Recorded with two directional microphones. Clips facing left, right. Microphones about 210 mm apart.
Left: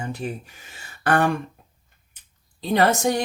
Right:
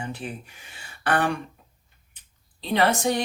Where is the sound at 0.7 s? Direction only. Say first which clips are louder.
Left 3 dB; 45° left (ahead or behind).